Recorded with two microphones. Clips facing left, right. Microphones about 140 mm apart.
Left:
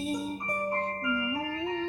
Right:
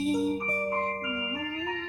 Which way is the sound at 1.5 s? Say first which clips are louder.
Left 2 dB; 30° left (ahead or behind).